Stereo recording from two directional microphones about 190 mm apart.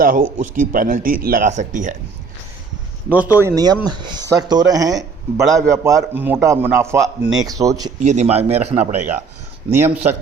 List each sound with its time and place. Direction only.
0.0 s speech: 45° right (ahead or behind)
3.1 s a man's voice: 10° right (ahead or behind)
7.9 s a man's voice: 35° right (ahead or behind)
9.6 s a man's voice: 10° right (ahead or behind)